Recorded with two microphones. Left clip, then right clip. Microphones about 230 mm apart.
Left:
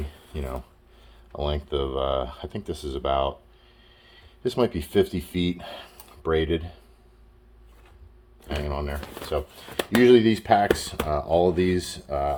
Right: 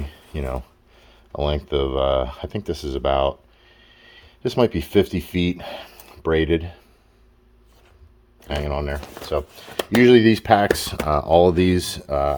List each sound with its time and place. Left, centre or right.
0.3 s speech: right
8.4 s speech: right
10.0 s speech: right